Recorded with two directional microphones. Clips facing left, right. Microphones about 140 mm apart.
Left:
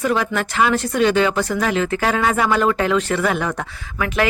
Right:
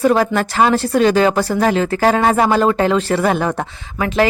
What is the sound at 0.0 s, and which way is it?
Speech, 40° right (ahead or behind).